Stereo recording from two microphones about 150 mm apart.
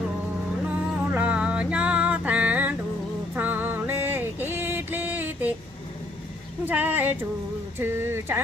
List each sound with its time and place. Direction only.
0.9 s music: 10° right (ahead or behind)
6.7 s a sound: 10° right (ahead or behind)
7.8 s speech: 15° right (ahead or behind)